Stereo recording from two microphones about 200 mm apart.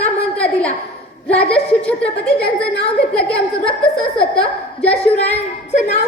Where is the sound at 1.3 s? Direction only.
5° left (ahead or behind).